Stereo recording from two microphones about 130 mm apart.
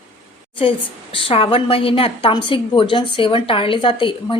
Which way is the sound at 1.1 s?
45° left (ahead or behind).